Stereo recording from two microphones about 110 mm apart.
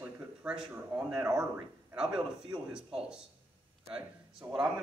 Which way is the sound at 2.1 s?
45° right (ahead or behind).